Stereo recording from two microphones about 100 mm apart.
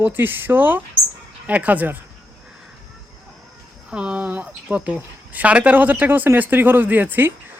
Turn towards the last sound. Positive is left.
turn(degrees=-20)  # may be behind; listen again after turning